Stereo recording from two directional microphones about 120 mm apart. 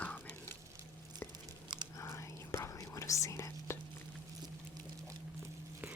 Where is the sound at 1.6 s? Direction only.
40° right (ahead or behind).